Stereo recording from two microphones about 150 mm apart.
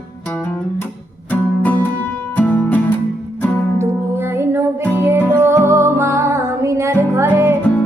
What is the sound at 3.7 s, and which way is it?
Music, 15° right (ahead or behind).